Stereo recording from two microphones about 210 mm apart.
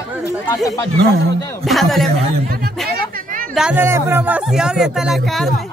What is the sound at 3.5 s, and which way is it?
Speech, 5° right (ahead or behind).